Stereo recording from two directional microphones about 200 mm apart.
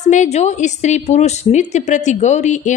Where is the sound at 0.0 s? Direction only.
35° left (ahead or behind).